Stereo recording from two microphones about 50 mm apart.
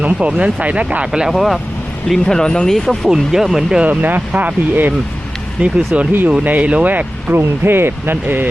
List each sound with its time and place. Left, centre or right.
0.0 s speech: right
1.1 s speech: centre
2.0 s speech: centre
3.1 s speech: centre
3.8 s speech: right
5.6 s speech: right
6.4 s speech: right
7.3 s speech: right